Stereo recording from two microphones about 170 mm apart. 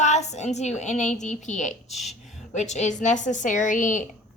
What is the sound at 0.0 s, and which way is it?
A woman's voice, 40° left (ahead or behind).